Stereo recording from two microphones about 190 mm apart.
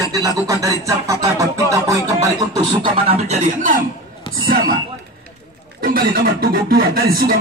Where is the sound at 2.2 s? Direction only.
20° right (ahead or behind).